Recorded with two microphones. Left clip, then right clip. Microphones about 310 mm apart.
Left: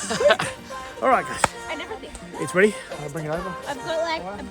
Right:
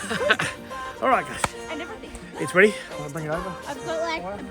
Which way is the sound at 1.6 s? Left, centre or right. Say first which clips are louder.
Left 2 dB; left.